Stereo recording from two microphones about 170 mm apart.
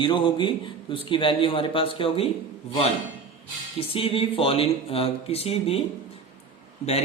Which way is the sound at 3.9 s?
35° left (ahead or behind).